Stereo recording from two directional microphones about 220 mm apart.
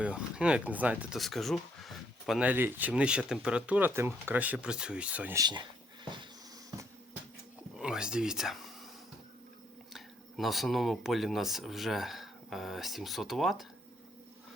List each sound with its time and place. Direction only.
0.0 s speech: 5° right (ahead or behind)
7.8 s speech: 5° right (ahead or behind)
9.9 s speech: centre (ahead or behind)